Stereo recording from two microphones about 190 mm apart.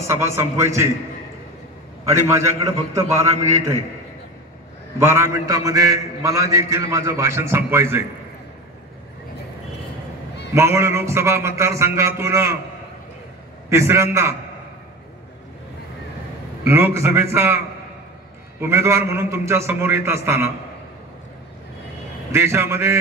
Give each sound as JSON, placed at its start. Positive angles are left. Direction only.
{"t": 0.0, "sound": "a man's voice", "side_deg": -15}
{"t": 2.0, "sound": "a man's voice", "side_deg": -15}
{"t": 4.9, "sound": "a man's voice", "side_deg": -15}
{"t": 10.5, "sound": "a man's voice", "side_deg": -15}
{"t": 13.7, "sound": "a man's voice", "side_deg": -15}
{"t": 16.6, "sound": "a man's voice", "side_deg": -15}
{"t": 18.6, "sound": "a man's voice", "side_deg": -15}
{"t": 22.3, "sound": "a man's voice", "side_deg": -15}